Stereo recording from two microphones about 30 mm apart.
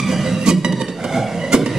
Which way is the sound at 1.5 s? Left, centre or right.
Right.